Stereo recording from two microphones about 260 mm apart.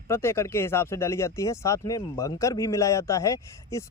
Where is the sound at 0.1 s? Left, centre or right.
Centre.